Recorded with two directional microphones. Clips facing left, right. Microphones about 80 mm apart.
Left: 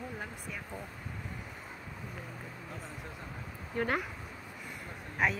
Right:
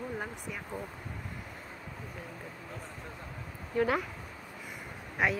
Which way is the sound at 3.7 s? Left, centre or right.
Centre.